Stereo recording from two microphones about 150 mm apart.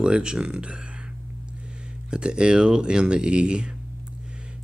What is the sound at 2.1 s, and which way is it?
Speech, 5° right (ahead or behind).